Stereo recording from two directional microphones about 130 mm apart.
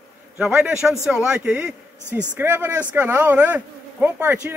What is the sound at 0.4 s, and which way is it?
A man's voice, 5° right (ahead or behind).